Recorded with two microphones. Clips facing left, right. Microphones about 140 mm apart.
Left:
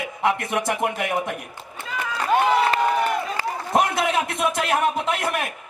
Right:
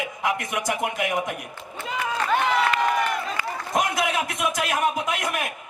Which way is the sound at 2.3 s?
30° left (ahead or behind).